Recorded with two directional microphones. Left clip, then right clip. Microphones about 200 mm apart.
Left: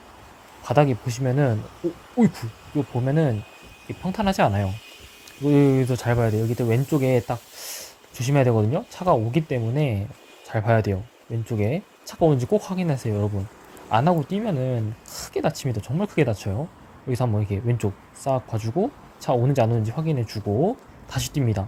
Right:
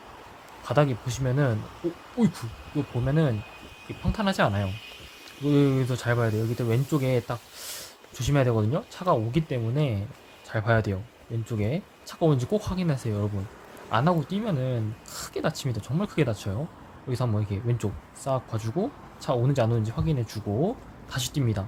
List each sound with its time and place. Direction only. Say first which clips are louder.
0.6 s speech: left 4 dB; 20° left (ahead or behind)